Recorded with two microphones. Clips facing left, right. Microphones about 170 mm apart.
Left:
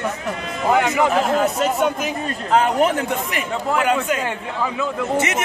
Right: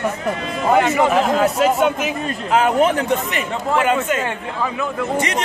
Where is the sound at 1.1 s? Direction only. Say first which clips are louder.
Right 2 dB; centre (ahead or behind).